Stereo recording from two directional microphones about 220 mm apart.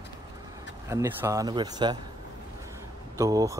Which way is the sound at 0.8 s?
10° right (ahead or behind).